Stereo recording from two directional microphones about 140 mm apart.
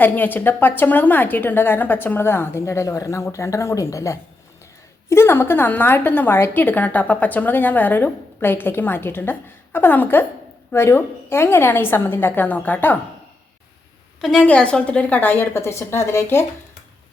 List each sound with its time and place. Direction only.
0.0 s a woman's voice: 15° left (ahead or behind)
14.2 s a woman's voice: centre (ahead or behind)
14.4 s a woman's voice: 10° left (ahead or behind)